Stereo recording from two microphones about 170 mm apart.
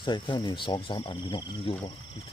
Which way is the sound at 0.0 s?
30° left (ahead or behind).